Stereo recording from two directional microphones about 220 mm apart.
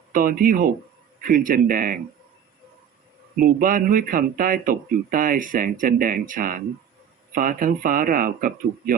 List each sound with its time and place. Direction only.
0.1 s speech: 40° right (ahead or behind)
3.3 s speech: 40° right (ahead or behind)